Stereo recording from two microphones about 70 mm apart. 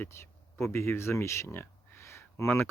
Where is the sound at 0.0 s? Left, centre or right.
Left.